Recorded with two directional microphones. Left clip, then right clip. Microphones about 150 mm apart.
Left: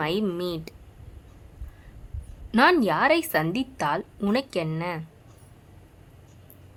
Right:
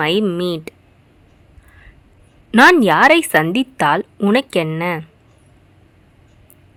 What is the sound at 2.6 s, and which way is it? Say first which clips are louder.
A woman's voice: right 10 dB; 50° right (ahead or behind).